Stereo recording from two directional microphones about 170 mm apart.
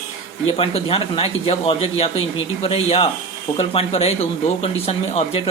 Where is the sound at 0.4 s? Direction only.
35° left (ahead or behind).